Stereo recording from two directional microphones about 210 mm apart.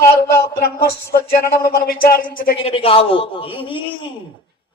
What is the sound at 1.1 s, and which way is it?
A man's voice, 45° left (ahead or behind).